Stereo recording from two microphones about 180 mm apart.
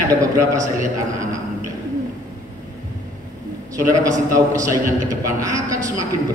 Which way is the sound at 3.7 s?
20° right (ahead or behind).